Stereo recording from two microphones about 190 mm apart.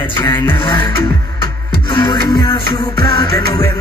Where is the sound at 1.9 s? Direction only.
25° left (ahead or behind).